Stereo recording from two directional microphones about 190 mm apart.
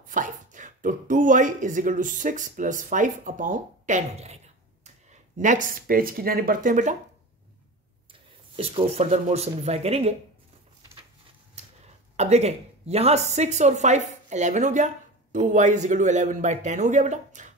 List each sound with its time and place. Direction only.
0.0 s speech: 45° right (ahead or behind)
5.4 s speech: 45° right (ahead or behind)
8.1 s speech: 30° right (ahead or behind)
12.2 s speech: 35° right (ahead or behind)